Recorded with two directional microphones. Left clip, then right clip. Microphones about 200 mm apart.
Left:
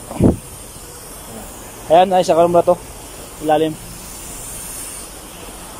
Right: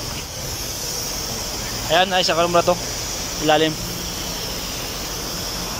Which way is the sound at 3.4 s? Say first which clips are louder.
Left 1 dB; 10° left (ahead or behind).